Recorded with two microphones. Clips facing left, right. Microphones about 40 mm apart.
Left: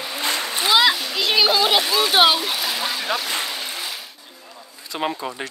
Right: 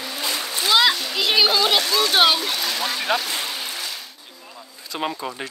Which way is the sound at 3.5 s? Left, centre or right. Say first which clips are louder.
Left 1 dB; centre.